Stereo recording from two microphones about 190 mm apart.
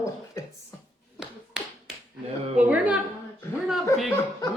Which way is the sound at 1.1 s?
Centre (ahead or behind).